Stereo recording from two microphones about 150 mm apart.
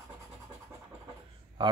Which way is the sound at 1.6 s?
30° right (ahead or behind).